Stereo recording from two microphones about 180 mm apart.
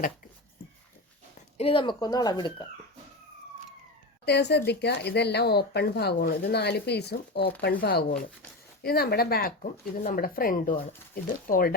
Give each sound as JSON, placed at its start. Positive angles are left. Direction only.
{"t": 1.4, "sound": "speech", "side_deg": 35}
{"t": 4.3, "sound": "speech", "side_deg": 70}